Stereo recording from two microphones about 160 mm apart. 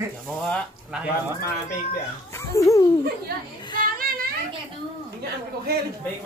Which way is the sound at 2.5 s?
20° left (ahead or behind).